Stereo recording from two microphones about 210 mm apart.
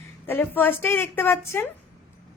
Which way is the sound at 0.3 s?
10° left (ahead or behind).